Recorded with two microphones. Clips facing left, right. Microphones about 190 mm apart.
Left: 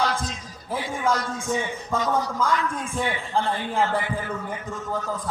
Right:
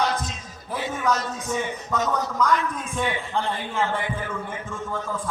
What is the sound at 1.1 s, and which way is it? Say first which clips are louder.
A man's voice: left 1 dB; 25° left (ahead or behind).